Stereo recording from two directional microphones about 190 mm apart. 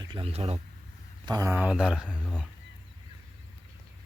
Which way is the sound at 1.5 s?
5° right (ahead or behind).